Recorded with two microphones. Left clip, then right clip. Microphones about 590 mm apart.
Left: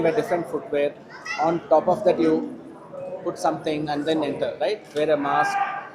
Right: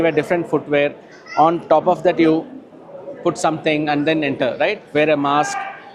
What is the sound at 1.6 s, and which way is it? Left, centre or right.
Speech, right.